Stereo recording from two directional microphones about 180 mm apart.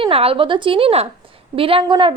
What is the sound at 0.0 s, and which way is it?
A woman's voice, 30° right (ahead or behind).